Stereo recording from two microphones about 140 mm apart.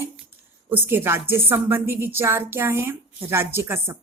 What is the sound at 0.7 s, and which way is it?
Speech, 15° right (ahead or behind).